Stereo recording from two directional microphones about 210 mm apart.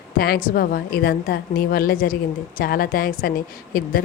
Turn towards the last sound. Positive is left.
turn(degrees=45)  # may be behind; listen again after turning